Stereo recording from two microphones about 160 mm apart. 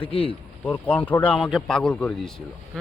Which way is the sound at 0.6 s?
10° left (ahead or behind).